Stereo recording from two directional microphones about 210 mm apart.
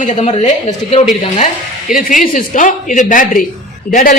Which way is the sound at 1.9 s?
40° left (ahead or behind).